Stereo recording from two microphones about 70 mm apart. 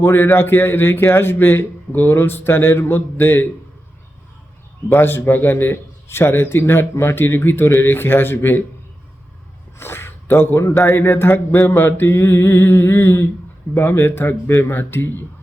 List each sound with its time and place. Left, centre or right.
0.0 s a man's voice: left
4.9 s a man's voice: left
9.7 s a man's voice: left
11.8 s a man's voice: left